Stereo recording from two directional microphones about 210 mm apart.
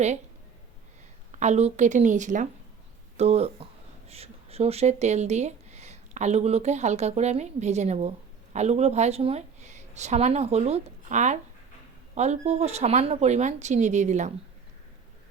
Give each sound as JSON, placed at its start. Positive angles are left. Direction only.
{"t": 1.3, "sound": "a woman's voice", "side_deg": -35}